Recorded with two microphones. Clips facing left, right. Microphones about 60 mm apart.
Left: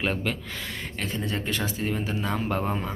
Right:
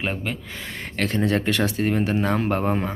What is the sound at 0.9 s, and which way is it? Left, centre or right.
Speech, right.